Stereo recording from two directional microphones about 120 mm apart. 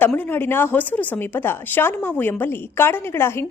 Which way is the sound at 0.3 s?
15° left (ahead or behind).